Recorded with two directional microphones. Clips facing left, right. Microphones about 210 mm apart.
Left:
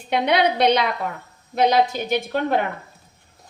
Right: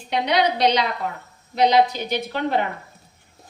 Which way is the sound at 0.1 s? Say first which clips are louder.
Left 2 dB; 55° left (ahead or behind).